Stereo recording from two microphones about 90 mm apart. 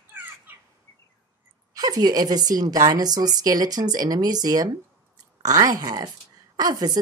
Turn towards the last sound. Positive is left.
turn(degrees=-45)  # may be behind; listen again after turning